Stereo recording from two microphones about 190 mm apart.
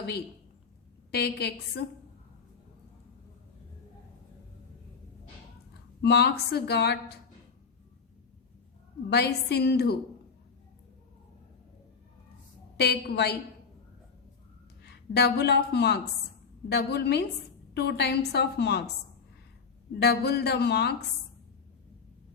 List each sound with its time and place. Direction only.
1.1 s speech: 60° left (ahead or behind)
6.0 s speech: 60° left (ahead or behind)
9.0 s speech: 60° left (ahead or behind)
12.7 s speech: 60° left (ahead or behind)
14.8 s a woman's voice: 60° left (ahead or behind)
20.0 s speech: 60° left (ahead or behind)